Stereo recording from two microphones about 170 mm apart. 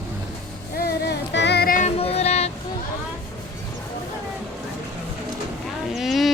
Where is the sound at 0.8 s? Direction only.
75° left (ahead or behind); by 1.9 s 55° left (ahead or behind).